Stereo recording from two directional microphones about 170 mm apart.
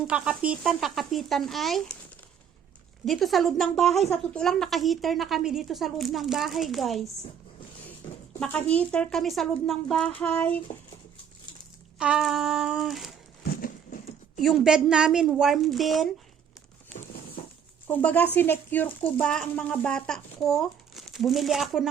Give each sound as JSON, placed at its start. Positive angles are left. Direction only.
{"t": 0.1, "sound": "a woman's voice", "side_deg": -5}
{"t": 3.1, "sound": "a woman's voice", "side_deg": 0}
{"t": 8.7, "sound": "a woman's voice", "side_deg": 5}
{"t": 11.9, "sound": "a woman's voice", "side_deg": -5}
{"t": 13.4, "sound": "horse", "side_deg": 60}
{"t": 14.4, "sound": "a woman's voice", "side_deg": -5}
{"t": 17.8, "sound": "a woman's voice", "side_deg": 10}